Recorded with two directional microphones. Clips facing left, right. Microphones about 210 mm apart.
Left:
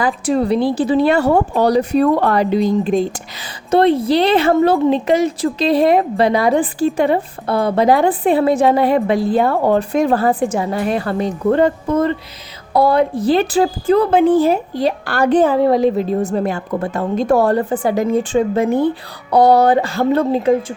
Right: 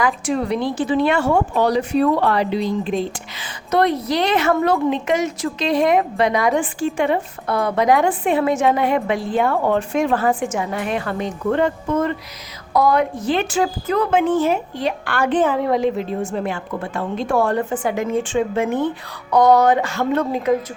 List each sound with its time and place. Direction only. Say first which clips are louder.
0.0 s a woman's voice: left 4 dB; 35° left (ahead or behind)
3.7 s a woman's voice: left 5 dB; 30° left (ahead or behind)